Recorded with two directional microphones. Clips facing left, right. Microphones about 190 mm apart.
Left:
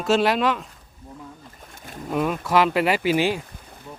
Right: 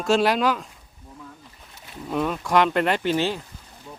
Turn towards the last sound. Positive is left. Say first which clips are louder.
# left 2 dB
turn(degrees=10)  # may be behind; listen again after turning